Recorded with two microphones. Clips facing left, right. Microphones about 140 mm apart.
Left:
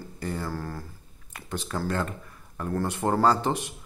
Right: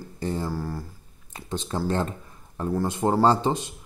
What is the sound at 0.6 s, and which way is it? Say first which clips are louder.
Speech: right 3 dB; 10° right (ahead or behind).